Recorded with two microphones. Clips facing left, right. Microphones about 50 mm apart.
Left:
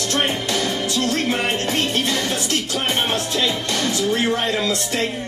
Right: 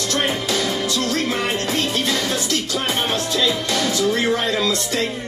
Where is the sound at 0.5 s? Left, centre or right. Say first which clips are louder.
Right 1 dB; left.